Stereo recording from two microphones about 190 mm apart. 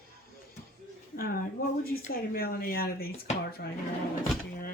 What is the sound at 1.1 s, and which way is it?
Speech, 50° left (ahead or behind).